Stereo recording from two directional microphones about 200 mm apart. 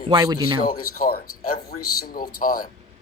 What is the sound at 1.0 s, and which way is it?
Speech, 50° left (ahead or behind).